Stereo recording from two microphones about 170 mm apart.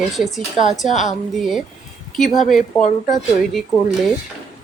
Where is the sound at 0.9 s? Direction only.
45° left (ahead or behind).